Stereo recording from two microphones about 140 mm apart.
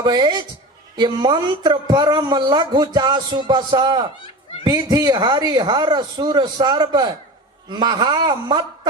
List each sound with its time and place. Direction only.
0.0 s a man's voice: 30° right (ahead or behind)